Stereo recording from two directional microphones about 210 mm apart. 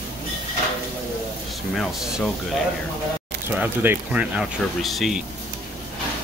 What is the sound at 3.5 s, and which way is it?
Speech, 10° right (ahead or behind).